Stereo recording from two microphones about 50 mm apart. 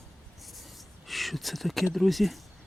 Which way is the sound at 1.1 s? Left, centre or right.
Centre.